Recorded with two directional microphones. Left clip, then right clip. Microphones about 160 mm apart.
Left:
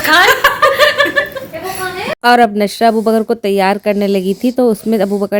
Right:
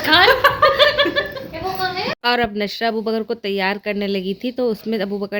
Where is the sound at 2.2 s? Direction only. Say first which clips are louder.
Left 11 dB; 40° left (ahead or behind).